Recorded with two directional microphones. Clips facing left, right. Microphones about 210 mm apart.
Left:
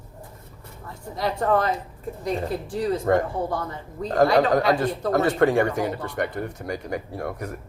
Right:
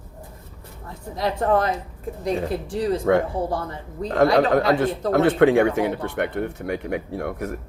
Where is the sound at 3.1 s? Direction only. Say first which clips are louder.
Right 2 dB; 85° right.